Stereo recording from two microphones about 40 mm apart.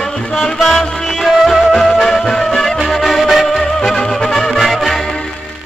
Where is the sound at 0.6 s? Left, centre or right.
Centre.